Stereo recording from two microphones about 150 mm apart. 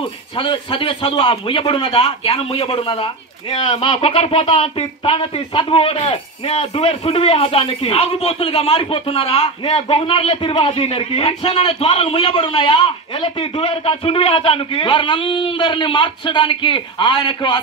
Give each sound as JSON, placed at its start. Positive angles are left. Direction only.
{"t": 0.4, "sound": "a man's voice", "side_deg": 35}